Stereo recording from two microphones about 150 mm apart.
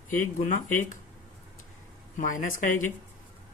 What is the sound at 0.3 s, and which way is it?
Speech, 60° left (ahead or behind).